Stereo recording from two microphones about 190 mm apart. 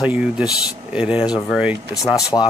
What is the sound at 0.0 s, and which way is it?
Speech, 5° right (ahead or behind).